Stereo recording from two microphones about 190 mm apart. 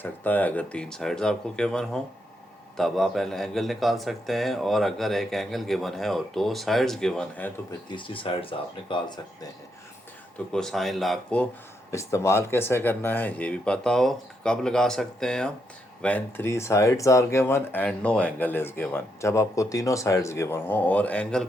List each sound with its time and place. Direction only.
0.0 s speech: 10° left (ahead or behind)
7.9 s speech: 25° left (ahead or behind)
10.5 s speech: centre (ahead or behind)
11.9 s speech: 15° left (ahead or behind)